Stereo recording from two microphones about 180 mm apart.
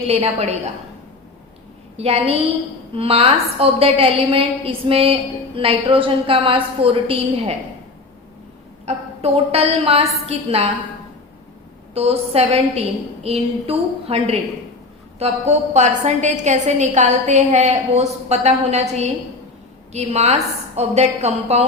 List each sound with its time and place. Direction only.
0.1 s a woman's voice: 35° right (ahead or behind)
2.0 s a woman's voice: 35° right (ahead or behind)
8.9 s a woman's voice: 35° right (ahead or behind)
11.9 s a woman's voice: 35° right (ahead or behind)